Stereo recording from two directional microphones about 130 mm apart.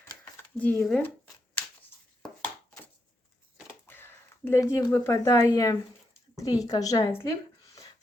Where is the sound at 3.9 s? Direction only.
15° left (ahead or behind).